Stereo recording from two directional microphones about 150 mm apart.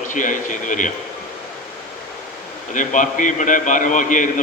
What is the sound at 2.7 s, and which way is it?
A man's voice, 60° left (ahead or behind).